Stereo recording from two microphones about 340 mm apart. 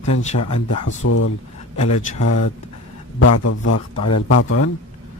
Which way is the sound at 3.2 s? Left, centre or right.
Left.